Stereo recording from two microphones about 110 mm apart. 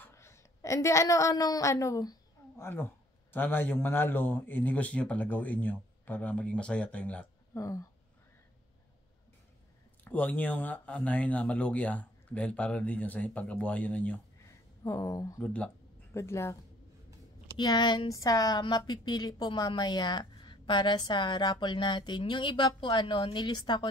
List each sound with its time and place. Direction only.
0.0 s a woman's voice: 25° left (ahead or behind)
7.5 s speech: 30° left (ahead or behind)
10.0 s speech: 15° left (ahead or behind)
14.8 s speech: 30° left (ahead or behind)
15.4 s speech: 10° left (ahead or behind)
16.1 s speech: 25° left (ahead or behind)
17.6 s a woman's voice: 45° left (ahead or behind)
18.1 s a woman's voice: 30° left (ahead or behind)